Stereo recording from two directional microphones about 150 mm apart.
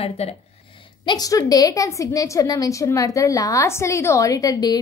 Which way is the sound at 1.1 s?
25° left (ahead or behind).